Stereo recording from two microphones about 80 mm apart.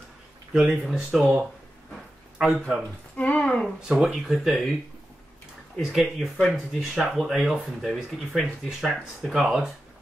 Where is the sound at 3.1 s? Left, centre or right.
Centre.